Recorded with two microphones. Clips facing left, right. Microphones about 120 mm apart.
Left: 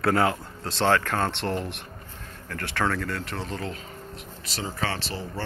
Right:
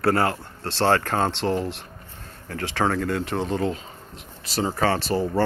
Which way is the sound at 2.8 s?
40° right (ahead or behind).